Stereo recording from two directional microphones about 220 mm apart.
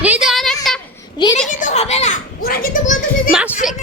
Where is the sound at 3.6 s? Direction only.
Centre (ahead or behind).